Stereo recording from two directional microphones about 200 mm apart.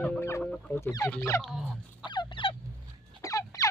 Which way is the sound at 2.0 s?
20° left (ahead or behind).